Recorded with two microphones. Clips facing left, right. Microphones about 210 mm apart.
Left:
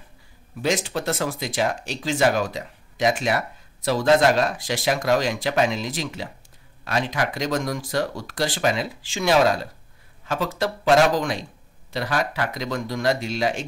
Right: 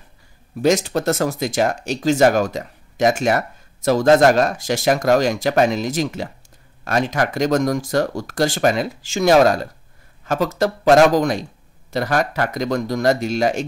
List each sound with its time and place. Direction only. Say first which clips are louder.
0.6 s speech: right 7 dB; 45° right (ahead or behind)